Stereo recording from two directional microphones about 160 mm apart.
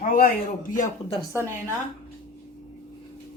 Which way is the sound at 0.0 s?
60° left (ahead or behind).